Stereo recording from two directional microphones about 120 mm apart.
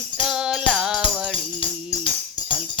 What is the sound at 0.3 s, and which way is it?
Music, 5° right (ahead or behind).